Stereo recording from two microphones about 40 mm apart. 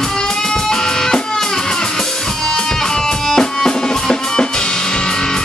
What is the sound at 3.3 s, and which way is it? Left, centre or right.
Music, centre.